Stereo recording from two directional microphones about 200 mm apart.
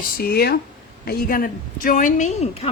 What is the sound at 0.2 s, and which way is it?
A woman's voice, 50° left (ahead or behind).